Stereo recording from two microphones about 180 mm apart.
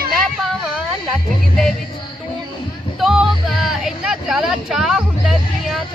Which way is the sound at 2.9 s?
Centre (ahead or behind).